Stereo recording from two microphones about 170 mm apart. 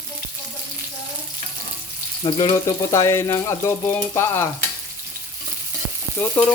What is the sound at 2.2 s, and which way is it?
Stir, 20° left (ahead or behind).